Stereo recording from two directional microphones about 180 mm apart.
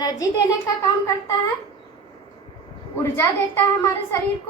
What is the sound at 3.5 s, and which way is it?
Speech, 15° left (ahead or behind).